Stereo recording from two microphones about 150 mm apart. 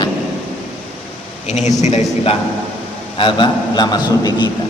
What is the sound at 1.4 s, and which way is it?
Speech, 50° left (ahead or behind).